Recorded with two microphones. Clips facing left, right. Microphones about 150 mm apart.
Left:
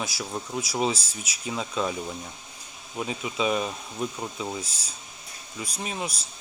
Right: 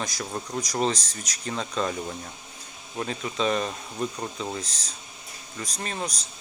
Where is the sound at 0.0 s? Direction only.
5° left (ahead or behind).